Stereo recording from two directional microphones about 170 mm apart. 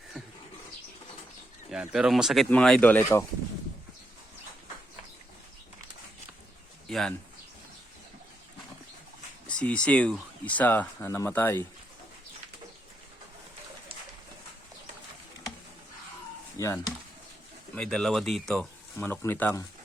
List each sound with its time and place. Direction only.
1.7 s speech: 5° right (ahead or behind); by 3.2 s 10° left (ahead or behind)
6.8 s bird: 5° left (ahead or behind)
9.5 s speech: 5° left (ahead or behind)
16.6 s speech: 15° left (ahead or behind)
17.7 s speech: 5° left (ahead or behind)
18.9 s speech: 15° left (ahead or behind)